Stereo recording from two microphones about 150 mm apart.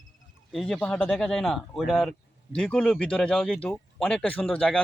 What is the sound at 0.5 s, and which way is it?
Speech, 5° left (ahead or behind).